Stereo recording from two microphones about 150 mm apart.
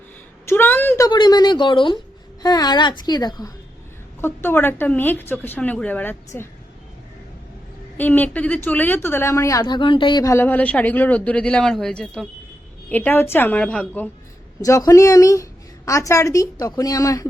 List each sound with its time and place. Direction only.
0.4 s a sound: 15° left (ahead or behind)
1.0 s a woman's voice: 30° left (ahead or behind)
4.4 s a woman's voice: 15° left (ahead or behind)
7.9 s a woman's voice: 10° left (ahead or behind); by 10.3 s 30° left (ahead or behind)
10.3 s a woman's voice: 10° left (ahead or behind)
14.6 s a woman's voice: 25° left (ahead or behind)